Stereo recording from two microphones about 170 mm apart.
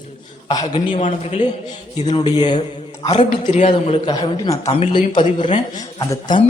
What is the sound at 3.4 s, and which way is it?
A man's voice, 40° left (ahead or behind).